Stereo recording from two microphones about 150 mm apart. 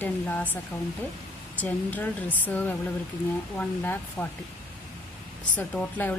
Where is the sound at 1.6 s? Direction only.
10° left (ahead or behind).